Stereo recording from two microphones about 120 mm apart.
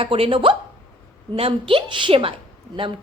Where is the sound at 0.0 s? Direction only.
50° right (ahead or behind).